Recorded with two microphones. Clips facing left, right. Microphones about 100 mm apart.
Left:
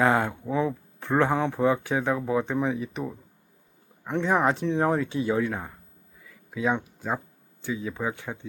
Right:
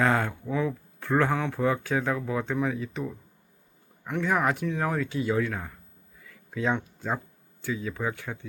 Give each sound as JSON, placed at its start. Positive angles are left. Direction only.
{"t": 0.0, "sound": "speech", "side_deg": 20}
{"t": 6.2, "sound": "a sound", "side_deg": 15}
{"t": 7.6, "sound": "speech", "side_deg": 20}